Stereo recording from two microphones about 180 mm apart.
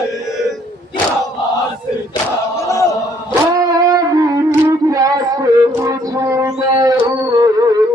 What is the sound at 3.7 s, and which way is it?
Music, 20° right (ahead or behind).